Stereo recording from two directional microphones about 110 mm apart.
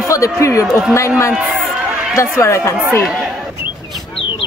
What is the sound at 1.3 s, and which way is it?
Speech, 10° right (ahead or behind).